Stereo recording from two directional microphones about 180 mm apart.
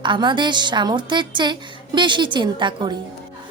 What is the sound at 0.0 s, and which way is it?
A woman's voice, 25° right (ahead or behind).